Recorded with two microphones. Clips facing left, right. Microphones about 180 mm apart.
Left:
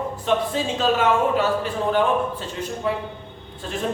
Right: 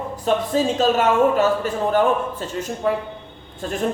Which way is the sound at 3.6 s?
45° right (ahead or behind).